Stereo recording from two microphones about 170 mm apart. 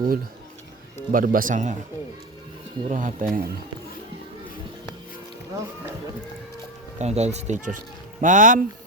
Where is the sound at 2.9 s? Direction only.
50° right (ahead or behind).